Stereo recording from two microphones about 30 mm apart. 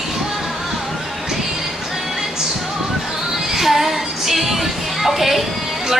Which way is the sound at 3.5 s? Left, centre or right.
Centre.